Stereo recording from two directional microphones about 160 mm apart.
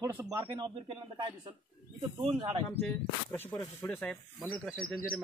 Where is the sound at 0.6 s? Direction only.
35° right (ahead or behind).